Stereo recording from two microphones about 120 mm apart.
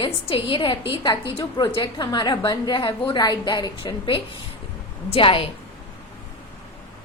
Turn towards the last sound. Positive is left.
turn(degrees=50)  # may be behind; listen again after turning